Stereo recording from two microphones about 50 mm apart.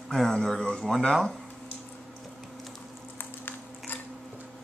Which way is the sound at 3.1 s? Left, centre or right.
Left.